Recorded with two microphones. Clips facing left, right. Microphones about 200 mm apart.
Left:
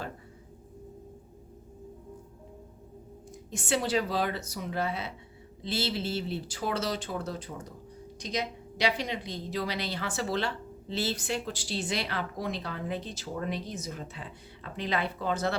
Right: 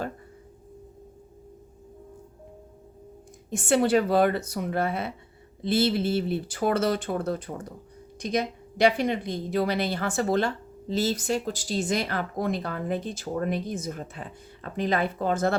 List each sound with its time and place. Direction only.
3.5 s a woman's voice: 55° right (ahead or behind)